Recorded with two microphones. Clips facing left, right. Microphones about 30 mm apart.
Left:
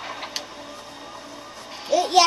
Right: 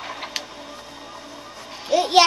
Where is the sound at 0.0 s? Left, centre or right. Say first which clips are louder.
Right 1 dB; centre.